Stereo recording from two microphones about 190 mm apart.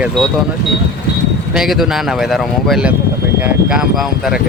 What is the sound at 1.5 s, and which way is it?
Speech, centre (ahead or behind).